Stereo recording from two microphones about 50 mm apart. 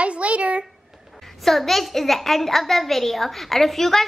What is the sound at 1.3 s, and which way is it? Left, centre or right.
A woman's voice, centre.